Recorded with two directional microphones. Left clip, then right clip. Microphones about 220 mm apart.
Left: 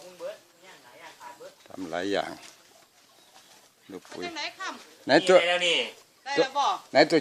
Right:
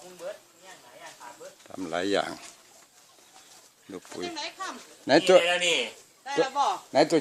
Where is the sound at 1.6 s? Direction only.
10° right (ahead or behind).